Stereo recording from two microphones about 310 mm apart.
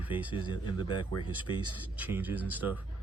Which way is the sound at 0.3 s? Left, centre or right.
Centre.